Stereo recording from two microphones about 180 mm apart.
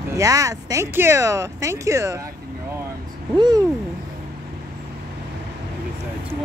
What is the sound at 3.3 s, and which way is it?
Speech, 25° right (ahead or behind).